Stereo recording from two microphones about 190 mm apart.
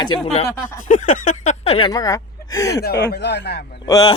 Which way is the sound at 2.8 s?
60° left (ahead or behind).